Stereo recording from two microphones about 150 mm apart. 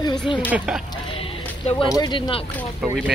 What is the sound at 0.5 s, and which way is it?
Speech, 5° right (ahead or behind).